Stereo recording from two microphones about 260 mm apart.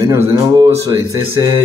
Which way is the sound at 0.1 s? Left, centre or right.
Centre.